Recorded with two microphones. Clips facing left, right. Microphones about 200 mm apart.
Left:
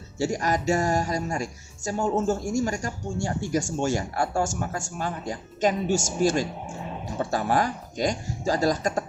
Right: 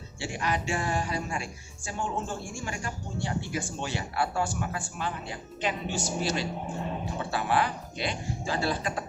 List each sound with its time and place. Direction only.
0.2 s speech: 40° left (ahead or behind)